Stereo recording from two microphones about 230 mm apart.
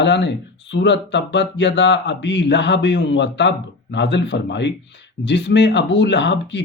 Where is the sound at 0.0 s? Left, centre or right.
Left.